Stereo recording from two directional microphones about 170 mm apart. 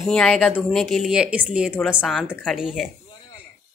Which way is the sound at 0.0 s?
Centre (ahead or behind).